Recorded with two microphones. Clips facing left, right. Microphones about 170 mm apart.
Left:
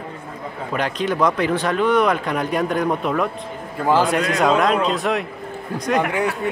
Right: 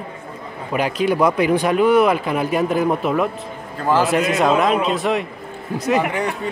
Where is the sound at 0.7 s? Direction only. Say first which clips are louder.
Right 3 dB; 10° right (ahead or behind).